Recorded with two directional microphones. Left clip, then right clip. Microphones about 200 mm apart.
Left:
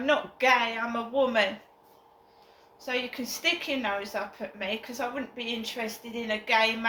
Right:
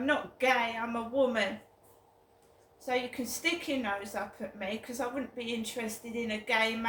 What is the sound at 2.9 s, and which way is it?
A woman's voice, 25° right (ahead or behind).